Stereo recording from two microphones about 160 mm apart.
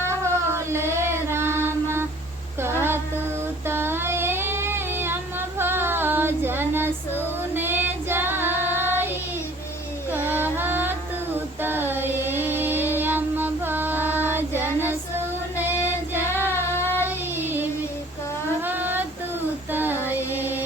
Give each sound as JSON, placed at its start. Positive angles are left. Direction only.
{"t": 0.1, "sound": "cat", "side_deg": -15}
{"t": 2.6, "sound": "a sound", "side_deg": -15}
{"t": 3.7, "sound": "child singing", "side_deg": -15}
{"t": 11.3, "sound": "female singing", "side_deg": -10}
{"t": 15.5, "sound": "child singing", "side_deg": -10}
{"t": 16.6, "sound": "child singing", "side_deg": 15}
{"t": 17.0, "sound": "child singing", "side_deg": -15}
{"t": 19.7, "sound": "female singing", "side_deg": -10}